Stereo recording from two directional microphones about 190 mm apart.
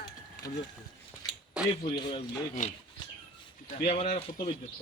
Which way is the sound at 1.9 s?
30° left (ahead or behind).